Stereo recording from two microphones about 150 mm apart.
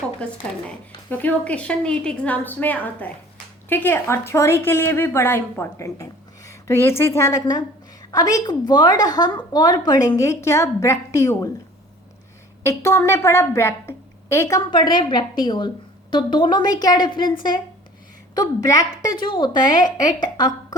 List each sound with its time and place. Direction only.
0.2 s a woman's voice: 10° left (ahead or behind)
12.6 s a woman's voice: 20° left (ahead or behind)
18.3 s a woman's voice: 20° left (ahead or behind)